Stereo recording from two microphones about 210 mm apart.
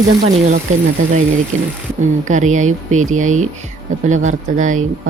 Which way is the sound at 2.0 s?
35° right (ahead or behind).